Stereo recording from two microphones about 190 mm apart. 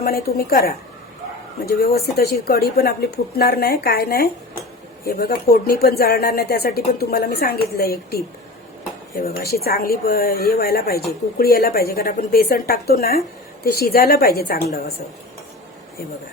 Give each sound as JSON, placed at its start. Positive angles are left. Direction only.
{"t": 0.0, "sound": "a woman's voice", "side_deg": 55}
{"t": 1.8, "sound": "a woman's voice", "side_deg": 55}